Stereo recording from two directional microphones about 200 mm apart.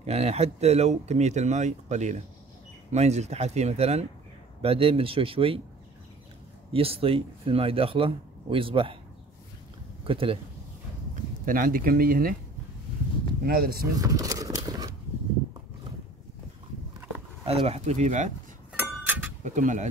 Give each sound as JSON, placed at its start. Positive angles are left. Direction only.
{"t": 0.0, "sound": "speech", "side_deg": -30}
{"t": 6.7, "sound": "speech", "side_deg": -30}
{"t": 10.0, "sound": "speech", "side_deg": -25}
{"t": 11.4, "sound": "speech", "side_deg": -45}
{"t": 13.4, "sound": "speech", "side_deg": -50}
{"t": 13.9, "sound": "a sound", "side_deg": -20}
{"t": 17.5, "sound": "speech", "side_deg": -30}
{"t": 18.7, "sound": "wind chime", "side_deg": -10}
{"t": 19.4, "sound": "speech", "side_deg": -40}